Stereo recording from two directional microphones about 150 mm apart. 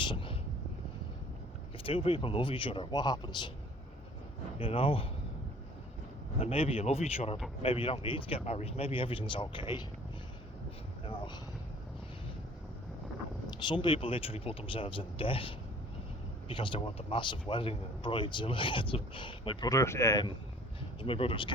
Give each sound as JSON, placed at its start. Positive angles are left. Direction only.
{"t": 0.0, "sound": "a sound", "side_deg": 30}
{"t": 1.8, "sound": "speech", "side_deg": 35}
{"t": 4.5, "sound": "speech", "side_deg": 35}
{"t": 6.4, "sound": "speech", "side_deg": 40}
{"t": 11.0, "sound": "a sound", "side_deg": 35}
{"t": 13.7, "sound": "speech", "side_deg": 30}
{"t": 21.0, "sound": "speech", "side_deg": 35}